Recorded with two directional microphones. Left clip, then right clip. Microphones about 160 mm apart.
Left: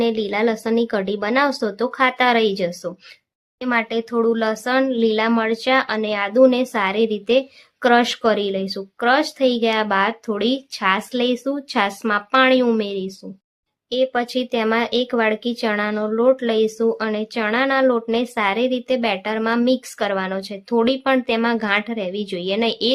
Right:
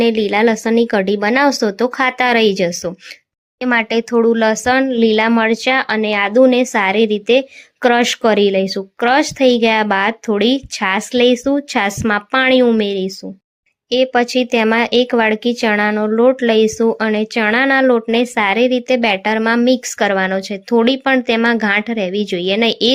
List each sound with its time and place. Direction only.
0.0 s speech: 25° right (ahead or behind)